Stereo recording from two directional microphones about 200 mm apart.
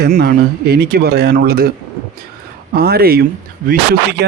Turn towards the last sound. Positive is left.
turn(degrees=-50)  # may be behind; listen again after turning